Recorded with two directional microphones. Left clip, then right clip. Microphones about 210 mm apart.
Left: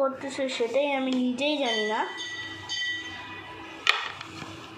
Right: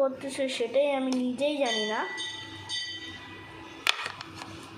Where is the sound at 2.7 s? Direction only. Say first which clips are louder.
Left 2 dB; 45° right (ahead or behind).